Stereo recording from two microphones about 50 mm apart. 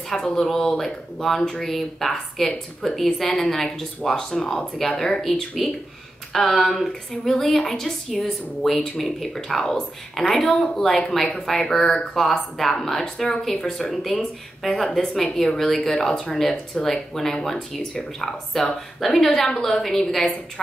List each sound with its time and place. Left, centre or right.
0.1 s speech: centre
6.3 s a woman's voice: centre